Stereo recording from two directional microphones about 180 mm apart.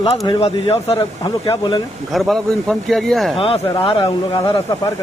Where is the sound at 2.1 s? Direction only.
Centre (ahead or behind).